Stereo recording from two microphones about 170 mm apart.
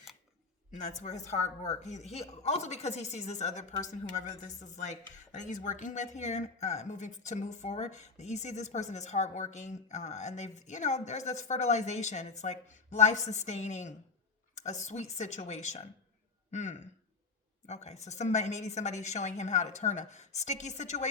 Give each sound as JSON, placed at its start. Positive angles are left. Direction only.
{"t": 0.8, "sound": "a woman's voice", "side_deg": 45}